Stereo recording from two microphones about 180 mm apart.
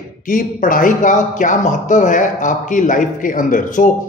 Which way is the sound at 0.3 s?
50° left (ahead or behind).